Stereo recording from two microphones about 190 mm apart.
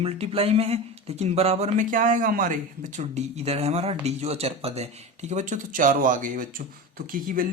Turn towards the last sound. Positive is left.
turn(degrees=-45)  # may be behind; listen again after turning